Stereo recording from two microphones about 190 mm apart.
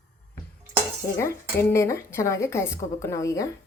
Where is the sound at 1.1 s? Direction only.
15° left (ahead or behind).